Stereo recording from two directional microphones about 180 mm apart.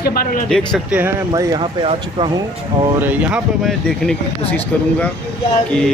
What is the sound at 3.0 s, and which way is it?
Speech, 10° right (ahead or behind).